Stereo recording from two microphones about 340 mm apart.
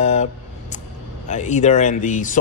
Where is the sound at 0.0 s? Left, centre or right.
Centre.